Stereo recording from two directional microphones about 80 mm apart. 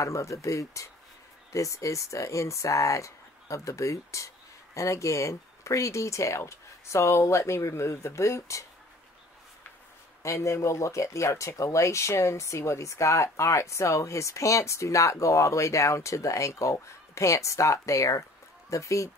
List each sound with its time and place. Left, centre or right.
0.0 s speech: left
10.2 s speech: left